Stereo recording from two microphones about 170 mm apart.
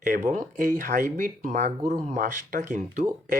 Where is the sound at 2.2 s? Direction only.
55° right (ahead or behind).